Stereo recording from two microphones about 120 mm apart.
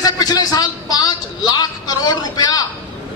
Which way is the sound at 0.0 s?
30° left (ahead or behind).